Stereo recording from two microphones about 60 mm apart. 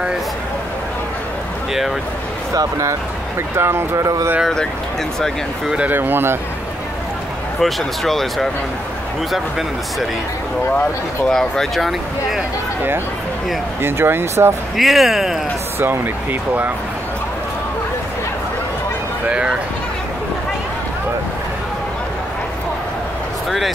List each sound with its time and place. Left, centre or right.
2.5 s speech: right
3.5 s speech: right
3.9 s speech: right
5.9 s speech: right
7.6 s speech: centre
11.2 s speech: centre
13.8 s speech: right
14.8 s speech: centre
15.8 s speech: right
19.2 s a sound: centre